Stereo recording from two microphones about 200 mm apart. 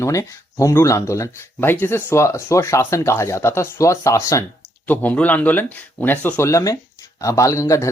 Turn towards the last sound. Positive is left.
turn(degrees=15)  # may be behind; listen again after turning